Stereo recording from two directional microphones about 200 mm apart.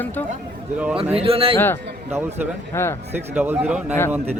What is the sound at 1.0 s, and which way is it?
Speech, 30° right (ahead or behind).